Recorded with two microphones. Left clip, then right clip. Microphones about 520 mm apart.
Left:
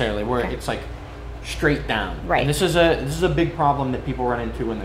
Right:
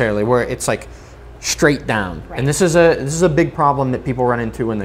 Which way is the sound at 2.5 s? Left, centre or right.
Right.